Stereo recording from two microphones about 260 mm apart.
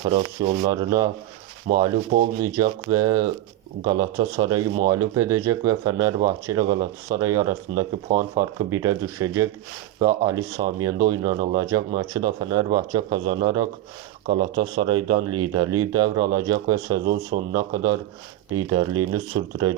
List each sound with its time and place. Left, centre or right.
0.0 s sanding: right
0.7 s speech: centre
1.7 s sanding: right
2.4 s speech: centre